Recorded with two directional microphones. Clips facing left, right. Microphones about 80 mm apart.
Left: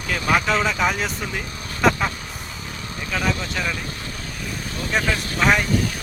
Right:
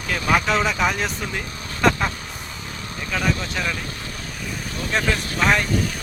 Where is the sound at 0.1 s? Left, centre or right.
Centre.